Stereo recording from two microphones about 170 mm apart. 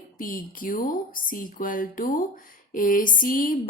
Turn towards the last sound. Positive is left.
turn(degrees=55)  # may be behind; listen again after turning